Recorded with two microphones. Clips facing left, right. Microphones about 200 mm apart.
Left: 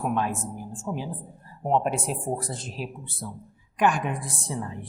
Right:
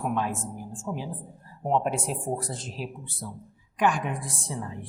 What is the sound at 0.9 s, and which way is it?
Speech, 45° left (ahead or behind).